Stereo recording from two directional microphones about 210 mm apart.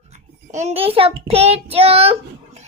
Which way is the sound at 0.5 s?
30° right (ahead or behind).